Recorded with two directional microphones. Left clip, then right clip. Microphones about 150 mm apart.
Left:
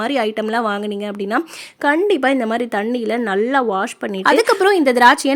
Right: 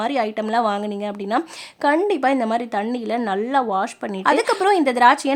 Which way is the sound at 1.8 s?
5° left (ahead or behind).